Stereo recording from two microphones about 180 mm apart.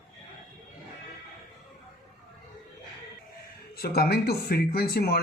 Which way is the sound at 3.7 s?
60° left (ahead or behind).